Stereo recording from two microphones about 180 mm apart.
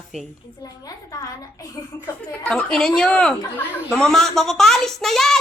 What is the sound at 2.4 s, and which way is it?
A woman's voice, 5° left (ahead or behind).